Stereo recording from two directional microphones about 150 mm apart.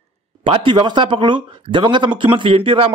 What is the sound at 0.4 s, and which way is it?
A man's voice, 35° right (ahead or behind).